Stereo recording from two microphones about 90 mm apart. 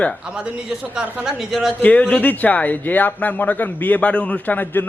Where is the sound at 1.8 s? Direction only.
15° left (ahead or behind).